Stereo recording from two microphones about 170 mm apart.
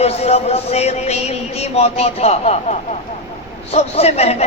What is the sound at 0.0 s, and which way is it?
A man's voice, 40° left (ahead or behind).